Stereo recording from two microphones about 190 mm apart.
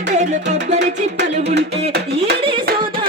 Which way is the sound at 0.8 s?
65° right (ahead or behind).